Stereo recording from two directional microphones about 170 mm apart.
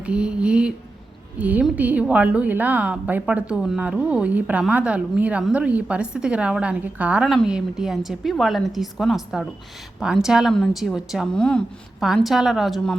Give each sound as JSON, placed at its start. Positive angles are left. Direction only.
{"t": 0.0, "sound": "a woman's voice", "side_deg": -5}